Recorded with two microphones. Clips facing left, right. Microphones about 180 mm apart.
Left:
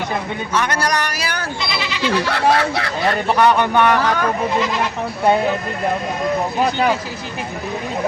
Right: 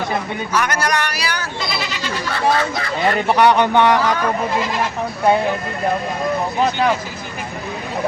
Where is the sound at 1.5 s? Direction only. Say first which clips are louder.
Even; 45° right (ahead or behind).